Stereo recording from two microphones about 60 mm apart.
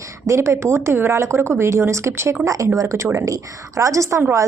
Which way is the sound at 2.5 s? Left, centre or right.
Right.